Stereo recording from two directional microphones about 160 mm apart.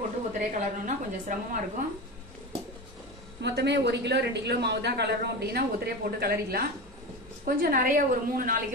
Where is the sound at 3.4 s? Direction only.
90° right.